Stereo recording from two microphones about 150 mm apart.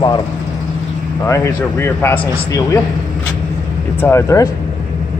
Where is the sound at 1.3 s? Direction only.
15° left (ahead or behind).